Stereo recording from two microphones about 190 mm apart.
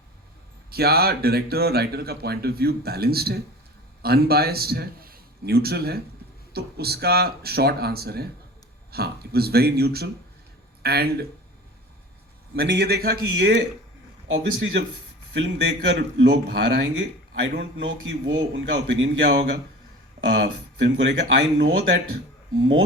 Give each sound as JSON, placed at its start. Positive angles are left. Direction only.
{"t": 0.7, "sound": "a man's voice", "side_deg": -55}
{"t": 12.5, "sound": "speech", "side_deg": -65}
{"t": 14.3, "sound": "a man's voice", "side_deg": -75}
{"t": 16.0, "sound": "a man's voice", "side_deg": -65}